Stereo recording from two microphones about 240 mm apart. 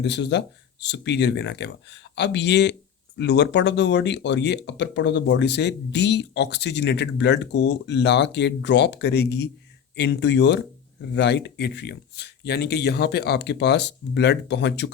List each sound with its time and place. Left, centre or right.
0.0 s speech: left